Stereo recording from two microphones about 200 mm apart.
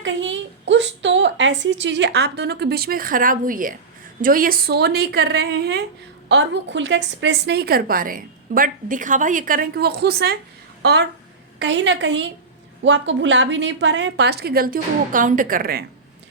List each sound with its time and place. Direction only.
0.0 s a woman's voice: 70° right (ahead or behind)
11.6 s a woman's voice: 65° right (ahead or behind); by 15.8 s 45° right (ahead or behind)